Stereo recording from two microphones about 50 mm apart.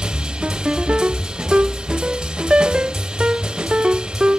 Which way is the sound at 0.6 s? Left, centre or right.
Centre.